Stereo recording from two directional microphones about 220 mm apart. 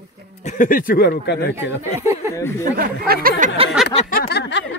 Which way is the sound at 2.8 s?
45° right (ahead or behind).